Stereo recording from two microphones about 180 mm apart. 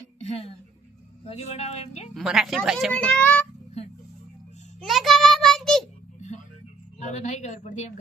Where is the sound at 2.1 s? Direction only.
Centre (ahead or behind).